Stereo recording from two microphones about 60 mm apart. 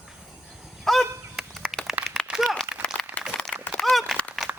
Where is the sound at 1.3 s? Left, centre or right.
Centre.